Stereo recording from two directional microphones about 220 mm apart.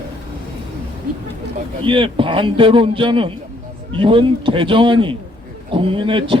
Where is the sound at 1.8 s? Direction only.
25° right (ahead or behind).